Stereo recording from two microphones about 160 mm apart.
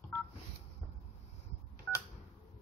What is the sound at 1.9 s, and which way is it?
Telephone dialing, 15° left (ahead or behind).